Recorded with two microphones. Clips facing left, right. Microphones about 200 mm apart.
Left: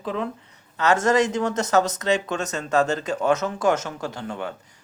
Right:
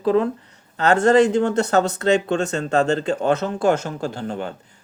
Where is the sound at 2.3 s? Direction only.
30° right (ahead or behind).